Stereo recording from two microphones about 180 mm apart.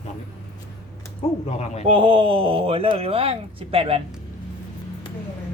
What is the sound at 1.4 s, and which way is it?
Speech, 35° left (ahead or behind).